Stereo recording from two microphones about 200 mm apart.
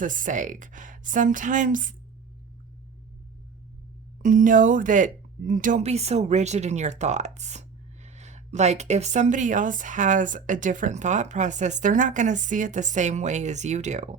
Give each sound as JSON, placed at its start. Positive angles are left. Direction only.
{"t": 0.0, "sound": "speech", "side_deg": -40}
{"t": 4.2, "sound": "speech", "side_deg": -40}